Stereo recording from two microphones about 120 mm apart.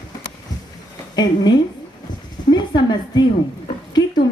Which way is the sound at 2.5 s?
35° left (ahead or behind).